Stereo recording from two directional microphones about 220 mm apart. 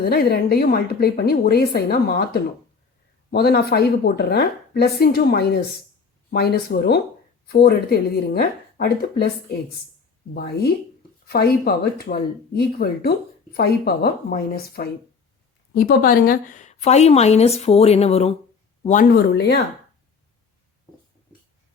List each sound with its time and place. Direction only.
0.0 s speech: 45° left (ahead or behind)
10.3 s a woman's voice: 45° left (ahead or behind)